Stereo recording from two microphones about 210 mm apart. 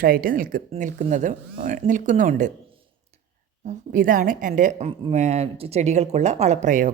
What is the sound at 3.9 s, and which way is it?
Speech, 40° right (ahead or behind).